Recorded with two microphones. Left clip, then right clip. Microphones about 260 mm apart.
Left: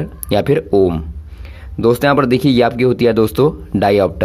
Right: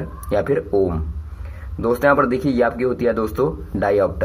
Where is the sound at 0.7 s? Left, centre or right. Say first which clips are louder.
Left 6 dB; left.